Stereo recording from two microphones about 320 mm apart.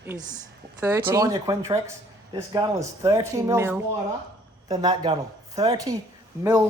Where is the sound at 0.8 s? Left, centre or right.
Centre.